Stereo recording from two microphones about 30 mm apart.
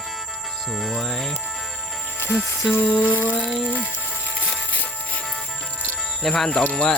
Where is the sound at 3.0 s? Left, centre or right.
Left.